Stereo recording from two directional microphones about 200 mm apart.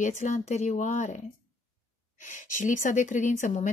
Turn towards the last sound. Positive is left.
turn(degrees=40)  # may be behind; listen again after turning